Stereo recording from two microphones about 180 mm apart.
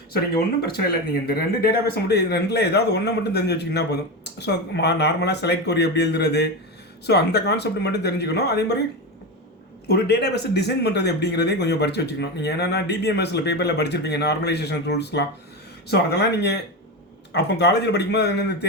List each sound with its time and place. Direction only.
0.6 s a man's voice: 60° left (ahead or behind)
9.8 s a man's voice: 65° left (ahead or behind)